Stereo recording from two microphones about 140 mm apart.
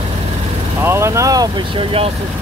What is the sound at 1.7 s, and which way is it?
Speech, 40° right (ahead or behind).